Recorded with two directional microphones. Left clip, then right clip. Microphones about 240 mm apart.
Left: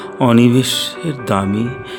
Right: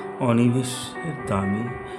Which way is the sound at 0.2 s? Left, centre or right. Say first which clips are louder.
Left 10 dB; left.